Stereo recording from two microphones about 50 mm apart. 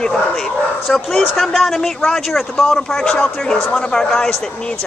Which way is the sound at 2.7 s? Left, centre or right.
Centre.